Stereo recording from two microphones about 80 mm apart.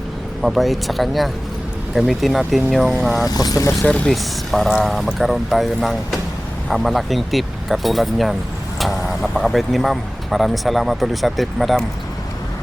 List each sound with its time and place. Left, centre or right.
0.4 s speech: centre
3.2 s speech: left
3.8 s speech: centre
4.1 s speech: centre